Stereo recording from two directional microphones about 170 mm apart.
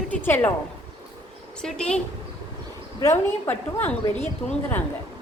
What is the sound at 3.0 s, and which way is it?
Speech, 15° left (ahead or behind).